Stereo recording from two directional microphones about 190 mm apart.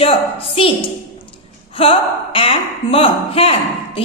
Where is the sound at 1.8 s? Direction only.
30° left (ahead or behind).